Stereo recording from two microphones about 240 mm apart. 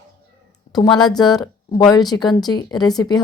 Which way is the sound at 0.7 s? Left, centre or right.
Left.